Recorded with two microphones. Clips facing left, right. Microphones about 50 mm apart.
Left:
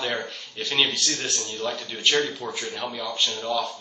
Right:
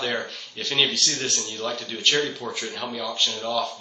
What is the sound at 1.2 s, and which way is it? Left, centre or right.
Speech, left.